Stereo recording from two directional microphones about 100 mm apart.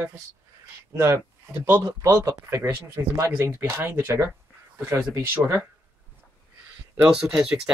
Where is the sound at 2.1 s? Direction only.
35° right (ahead or behind).